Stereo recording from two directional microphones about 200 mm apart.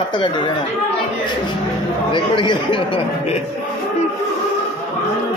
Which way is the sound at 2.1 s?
25° left (ahead or behind).